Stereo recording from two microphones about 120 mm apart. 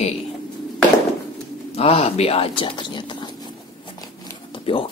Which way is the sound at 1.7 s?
55° left (ahead or behind).